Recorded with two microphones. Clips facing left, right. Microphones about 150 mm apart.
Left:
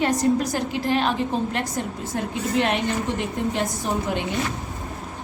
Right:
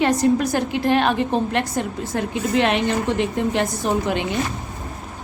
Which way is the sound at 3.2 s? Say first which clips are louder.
Right 4 dB; 75° right (ahead or behind).